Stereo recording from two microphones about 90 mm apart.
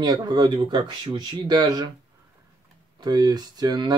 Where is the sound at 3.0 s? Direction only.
50° right (ahead or behind).